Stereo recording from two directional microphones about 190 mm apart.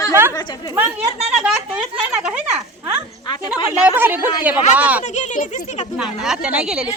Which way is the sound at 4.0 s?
10° right (ahead or behind).